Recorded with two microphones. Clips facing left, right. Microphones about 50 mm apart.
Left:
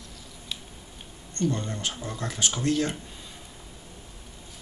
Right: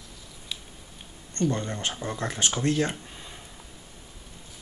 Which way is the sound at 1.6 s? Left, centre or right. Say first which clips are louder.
Right 1 dB; right.